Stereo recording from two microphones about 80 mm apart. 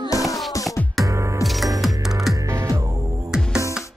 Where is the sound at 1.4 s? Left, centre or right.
Centre.